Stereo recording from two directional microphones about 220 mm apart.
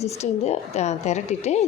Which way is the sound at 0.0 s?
30° left (ahead or behind).